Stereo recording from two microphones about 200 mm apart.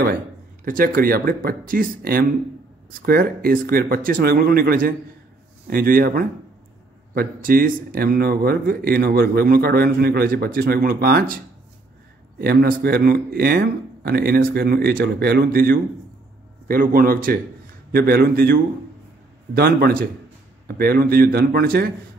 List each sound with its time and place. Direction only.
0.7 s speech: 45° right (ahead or behind)
12.4 s speech: 50° right (ahead or behind)